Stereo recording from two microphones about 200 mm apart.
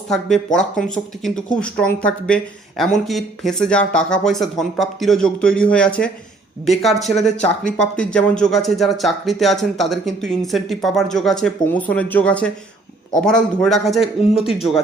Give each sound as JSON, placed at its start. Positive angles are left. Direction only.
{"t": 0.1, "sound": "speech", "side_deg": 0}